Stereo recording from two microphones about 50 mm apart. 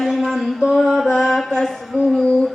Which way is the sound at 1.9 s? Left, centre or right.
Right.